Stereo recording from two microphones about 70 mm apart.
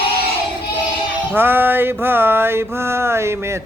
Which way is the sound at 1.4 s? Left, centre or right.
Right.